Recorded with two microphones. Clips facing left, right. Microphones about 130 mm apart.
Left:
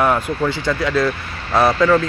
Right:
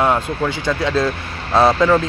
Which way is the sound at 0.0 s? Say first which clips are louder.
Even; 20° right (ahead or behind).